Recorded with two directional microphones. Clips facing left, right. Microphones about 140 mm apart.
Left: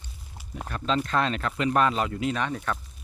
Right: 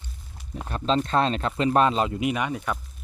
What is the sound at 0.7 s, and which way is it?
Speech, 25° right (ahead or behind).